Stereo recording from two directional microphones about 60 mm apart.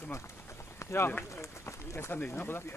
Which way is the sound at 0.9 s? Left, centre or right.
Left.